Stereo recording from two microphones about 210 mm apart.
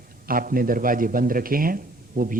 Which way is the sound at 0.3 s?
45° right (ahead or behind).